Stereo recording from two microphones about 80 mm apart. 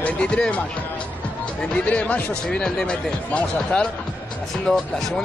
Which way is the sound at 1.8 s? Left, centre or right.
Centre.